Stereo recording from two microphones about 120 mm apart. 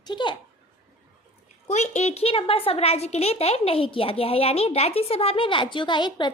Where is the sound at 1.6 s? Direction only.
70° left (ahead or behind).